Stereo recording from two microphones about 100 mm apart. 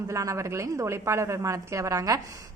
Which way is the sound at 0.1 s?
30° right (ahead or behind).